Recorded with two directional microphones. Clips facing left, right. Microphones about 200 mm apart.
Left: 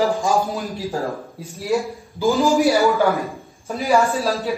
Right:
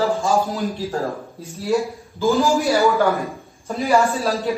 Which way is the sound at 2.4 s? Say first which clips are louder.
Left 3 dB; 15° left (ahead or behind).